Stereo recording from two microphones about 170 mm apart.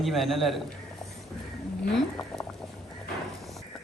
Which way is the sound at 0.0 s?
Centre (ahead or behind).